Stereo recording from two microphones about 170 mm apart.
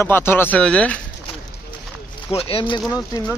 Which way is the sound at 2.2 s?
30° left (ahead or behind).